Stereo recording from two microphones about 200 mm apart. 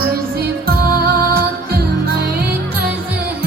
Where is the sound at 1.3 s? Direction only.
50° right (ahead or behind).